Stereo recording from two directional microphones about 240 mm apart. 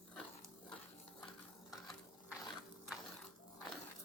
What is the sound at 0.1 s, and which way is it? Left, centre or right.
Dog, centre.